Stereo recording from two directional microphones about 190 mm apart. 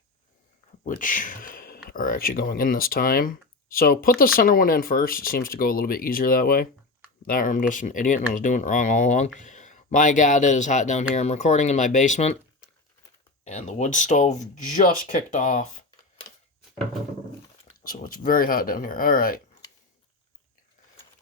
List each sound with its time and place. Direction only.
0.9 s speech: 45° left (ahead or behind)
13.4 s speech: 40° left (ahead or behind)
17.8 s speech: 50° left (ahead or behind)